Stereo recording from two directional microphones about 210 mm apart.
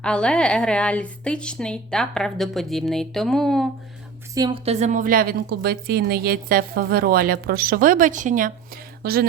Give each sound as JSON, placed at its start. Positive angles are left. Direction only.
{"t": 0.0, "sound": "a woman's voice", "side_deg": 5}
{"t": 4.4, "sound": "a woman's voice", "side_deg": -20}